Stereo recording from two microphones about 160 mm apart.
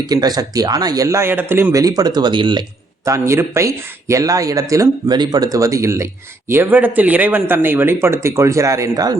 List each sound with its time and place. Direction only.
0.1 s speech: 25° right (ahead or behind)